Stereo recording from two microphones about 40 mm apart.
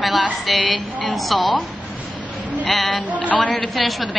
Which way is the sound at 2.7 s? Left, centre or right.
Centre.